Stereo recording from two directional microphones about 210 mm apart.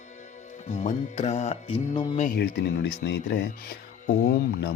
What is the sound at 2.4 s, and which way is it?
Speech, 50° left (ahead or behind).